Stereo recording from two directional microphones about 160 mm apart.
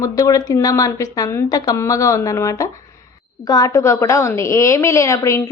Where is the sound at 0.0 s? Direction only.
20° left (ahead or behind).